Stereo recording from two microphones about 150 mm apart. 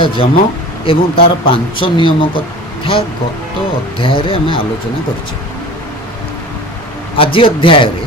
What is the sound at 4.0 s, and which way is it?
Speech, 35° left (ahead or behind).